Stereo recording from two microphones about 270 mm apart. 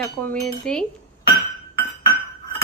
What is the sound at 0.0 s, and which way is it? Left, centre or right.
Speech, centre.